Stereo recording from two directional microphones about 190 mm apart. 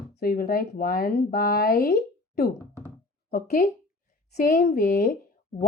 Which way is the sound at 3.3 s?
45° left (ahead or behind).